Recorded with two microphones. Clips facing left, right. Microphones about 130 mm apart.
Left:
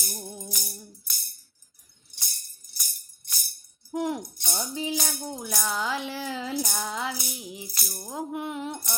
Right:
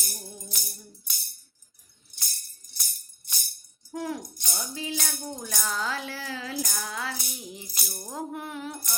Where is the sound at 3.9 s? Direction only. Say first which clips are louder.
Left 4 dB; 25° left (ahead or behind).